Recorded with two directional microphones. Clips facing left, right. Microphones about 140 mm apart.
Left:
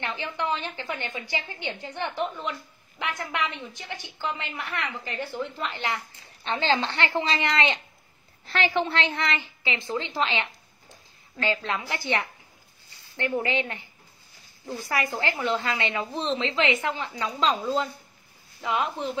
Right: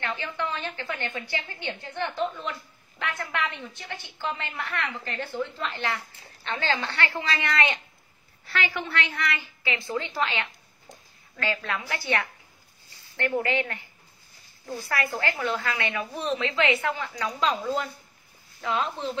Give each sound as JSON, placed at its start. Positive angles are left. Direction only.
{"t": 0.2, "sound": "a woman's voice", "side_deg": 20}
{"t": 14.9, "sound": "a woman's voice", "side_deg": 20}